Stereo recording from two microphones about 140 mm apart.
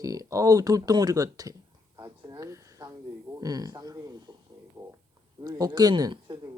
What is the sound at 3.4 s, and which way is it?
Speech, 25° right (ahead or behind).